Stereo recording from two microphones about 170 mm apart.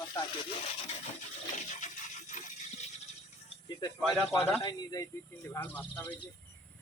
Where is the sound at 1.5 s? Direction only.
45° left (ahead or behind).